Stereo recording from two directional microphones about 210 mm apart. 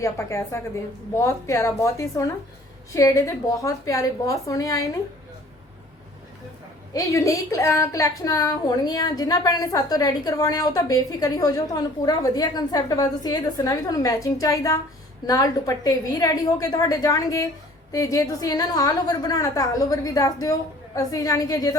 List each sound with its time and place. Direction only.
0.0 s a woman's voice: 15° left (ahead or behind)
6.9 s a woman's voice: 15° left (ahead or behind)